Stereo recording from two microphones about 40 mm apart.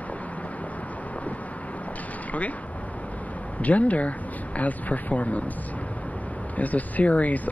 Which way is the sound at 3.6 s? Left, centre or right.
Left.